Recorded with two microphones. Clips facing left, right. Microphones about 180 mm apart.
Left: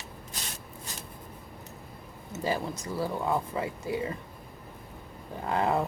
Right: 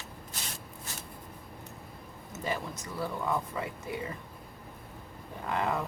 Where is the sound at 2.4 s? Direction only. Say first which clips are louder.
Left 4 dB; 30° left (ahead or behind).